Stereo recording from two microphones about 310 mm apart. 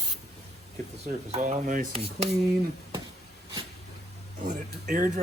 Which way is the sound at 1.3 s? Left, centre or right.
Right.